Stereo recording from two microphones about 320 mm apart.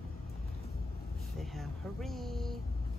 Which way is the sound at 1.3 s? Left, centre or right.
Centre.